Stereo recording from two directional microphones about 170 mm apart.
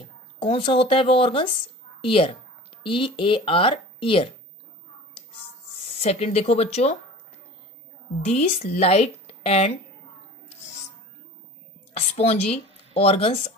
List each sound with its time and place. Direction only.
0.0 s speech: 35° left (ahead or behind)
5.9 s speech: 40° left (ahead or behind)
8.2 s a woman's voice: 40° left (ahead or behind)
11.9 s speech: 35° left (ahead or behind)